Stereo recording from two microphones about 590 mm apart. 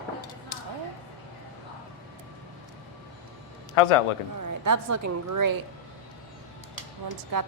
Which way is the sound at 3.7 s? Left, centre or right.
Left.